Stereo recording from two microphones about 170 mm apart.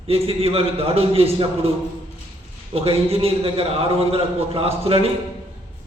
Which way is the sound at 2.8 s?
35° right (ahead or behind).